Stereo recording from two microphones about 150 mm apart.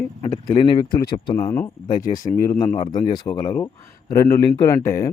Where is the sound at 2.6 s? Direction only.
30° left (ahead or behind).